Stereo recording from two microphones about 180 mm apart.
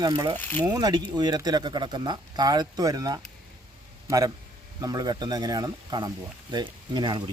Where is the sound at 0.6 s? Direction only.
20° right (ahead or behind).